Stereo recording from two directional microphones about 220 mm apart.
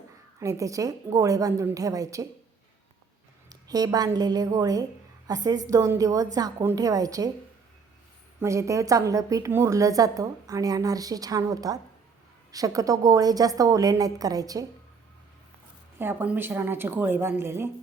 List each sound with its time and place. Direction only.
0.3 s a woman's voice: 15° right (ahead or behind)
3.5 s a woman's voice: 15° right (ahead or behind)
8.4 s a woman's voice: 15° right (ahead or behind)
16.0 s a woman's voice: 10° right (ahead or behind)